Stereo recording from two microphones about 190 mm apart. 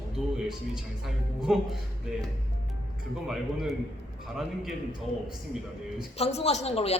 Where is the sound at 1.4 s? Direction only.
Centre (ahead or behind).